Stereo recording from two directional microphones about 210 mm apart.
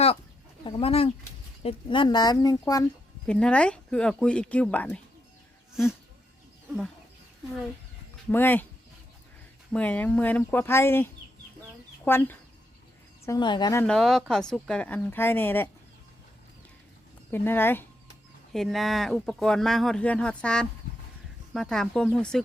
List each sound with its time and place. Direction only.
0.6 s speech: 25° left (ahead or behind)
3.2 s speech: 5° left (ahead or behind)
8.3 s speech: 10° left (ahead or behind)
9.7 s speech: 5° left (ahead or behind)
13.8 s speech: 5° left (ahead or behind)
17.3 s speech: 10° left (ahead or behind)